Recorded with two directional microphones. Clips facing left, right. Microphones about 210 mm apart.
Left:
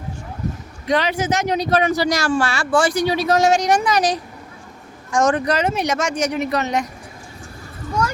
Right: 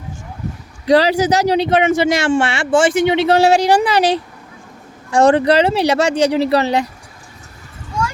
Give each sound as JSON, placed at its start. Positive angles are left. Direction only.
{"t": 0.9, "sound": "speech", "side_deg": -35}